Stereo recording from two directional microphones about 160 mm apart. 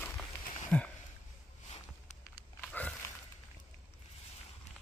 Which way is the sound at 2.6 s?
10° left (ahead or behind).